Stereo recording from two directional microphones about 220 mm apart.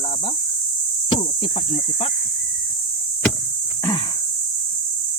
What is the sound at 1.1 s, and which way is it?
Speech, 25° left (ahead or behind).